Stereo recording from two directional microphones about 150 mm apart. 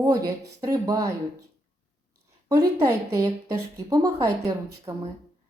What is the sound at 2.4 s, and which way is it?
A woman's voice, 25° right (ahead or behind).